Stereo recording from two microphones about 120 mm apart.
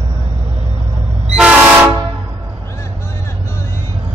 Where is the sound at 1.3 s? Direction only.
10° right (ahead or behind).